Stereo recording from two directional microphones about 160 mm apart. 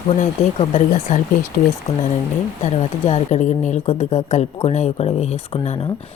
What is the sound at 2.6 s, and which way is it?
A woman's voice, 45° left (ahead or behind).